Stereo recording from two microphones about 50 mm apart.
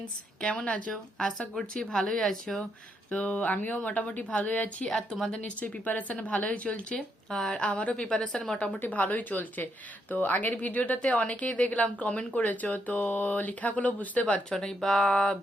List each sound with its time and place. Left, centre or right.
0.4 s a woman's voice: left
1.7 s speech: centre
3.1 s a woman's voice: left
7.3 s speech: centre
7.6 s a woman's voice: left
8.9 s speech: left
14.6 s speech: centre